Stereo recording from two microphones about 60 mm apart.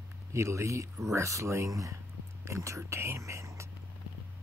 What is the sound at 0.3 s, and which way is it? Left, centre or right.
Speech, right.